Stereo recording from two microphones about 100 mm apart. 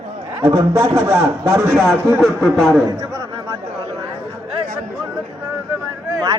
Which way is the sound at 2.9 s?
40° right (ahead or behind).